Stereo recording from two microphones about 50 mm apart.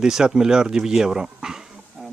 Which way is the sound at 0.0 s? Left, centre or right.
Centre.